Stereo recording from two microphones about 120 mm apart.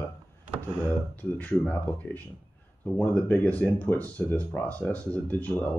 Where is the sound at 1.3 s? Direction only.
10° left (ahead or behind).